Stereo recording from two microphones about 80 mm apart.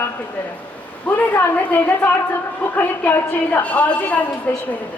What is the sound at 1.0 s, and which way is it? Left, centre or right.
A woman's voice, centre.